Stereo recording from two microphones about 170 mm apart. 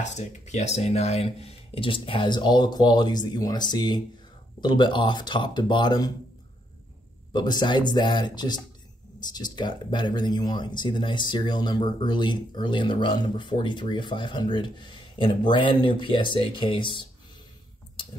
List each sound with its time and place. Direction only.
0.0 s speech: 40° left (ahead or behind); by 6.1 s 25° left (ahead or behind)
7.3 s speech: 25° left (ahead or behind)